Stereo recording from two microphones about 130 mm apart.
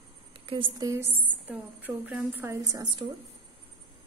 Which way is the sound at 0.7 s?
30° right (ahead or behind).